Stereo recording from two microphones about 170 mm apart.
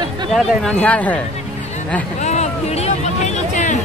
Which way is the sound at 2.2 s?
40° left (ahead or behind).